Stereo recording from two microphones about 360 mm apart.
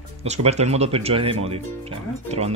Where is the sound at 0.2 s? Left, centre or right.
Centre.